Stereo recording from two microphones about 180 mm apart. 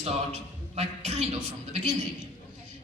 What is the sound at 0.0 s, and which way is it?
A man's voice, 40° right (ahead or behind).